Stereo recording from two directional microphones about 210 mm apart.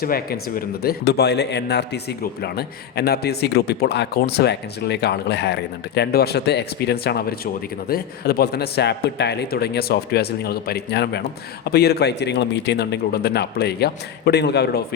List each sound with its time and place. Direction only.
0.0 s a man's voice: 45° left (ahead or behind)